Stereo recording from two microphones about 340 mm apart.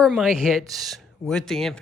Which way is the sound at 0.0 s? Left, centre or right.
Centre.